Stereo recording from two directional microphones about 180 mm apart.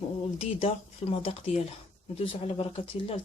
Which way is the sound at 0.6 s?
35° left (ahead or behind).